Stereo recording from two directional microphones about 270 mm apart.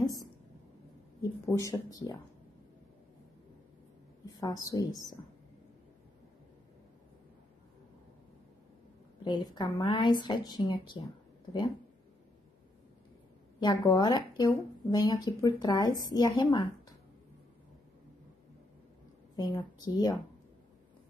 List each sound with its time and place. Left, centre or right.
0.0 s a sound: centre
1.4 s speech: centre
4.3 s a woman's voice: centre
9.2 s speech: centre
13.6 s speech: centre
19.3 s a woman's voice: centre